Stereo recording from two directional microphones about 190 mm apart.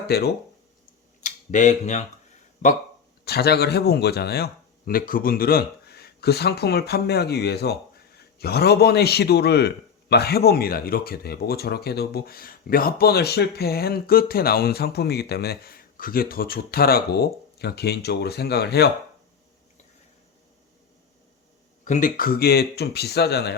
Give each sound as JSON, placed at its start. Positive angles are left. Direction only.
{"t": 0.1, "sound": "speech", "side_deg": 55}
{"t": 1.2, "sound": "speech", "side_deg": 40}
{"t": 3.2, "sound": "speech", "side_deg": 55}
{"t": 21.8, "sound": "speech", "side_deg": 40}